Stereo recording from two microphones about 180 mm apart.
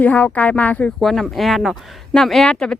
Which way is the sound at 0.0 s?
10° left (ahead or behind).